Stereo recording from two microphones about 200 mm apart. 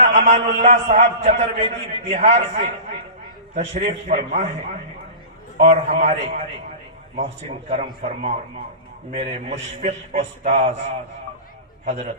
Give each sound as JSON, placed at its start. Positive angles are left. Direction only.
{"t": 0.0, "sound": "a sound", "side_deg": -35}
{"t": 0.6, "sound": "a man's voice", "side_deg": -35}
{"t": 5.5, "sound": "a man's voice", "side_deg": -35}
{"t": 8.0, "sound": "a man's voice", "side_deg": -35}
{"t": 11.9, "sound": "a man's voice", "side_deg": -35}